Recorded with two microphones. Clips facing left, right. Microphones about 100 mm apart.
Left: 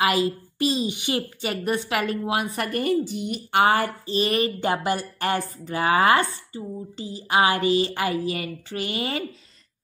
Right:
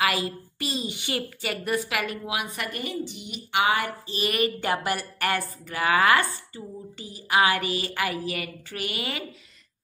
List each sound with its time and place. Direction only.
0.0 s a woman's voice: 25° left (ahead or behind)